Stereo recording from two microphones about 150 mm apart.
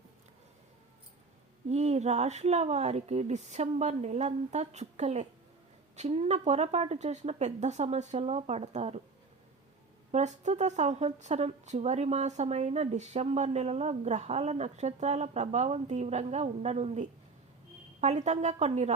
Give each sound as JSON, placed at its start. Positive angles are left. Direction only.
{"t": 1.7, "sound": "a woman's voice", "side_deg": -45}
{"t": 10.1, "sound": "a woman's voice", "side_deg": -50}